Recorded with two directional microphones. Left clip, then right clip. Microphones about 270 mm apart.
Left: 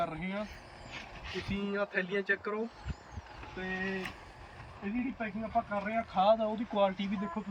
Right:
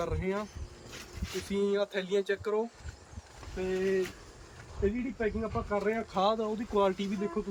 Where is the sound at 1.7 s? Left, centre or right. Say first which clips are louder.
Left 1 dB; right.